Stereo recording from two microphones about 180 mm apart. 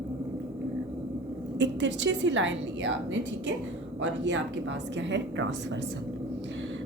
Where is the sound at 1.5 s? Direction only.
90° right.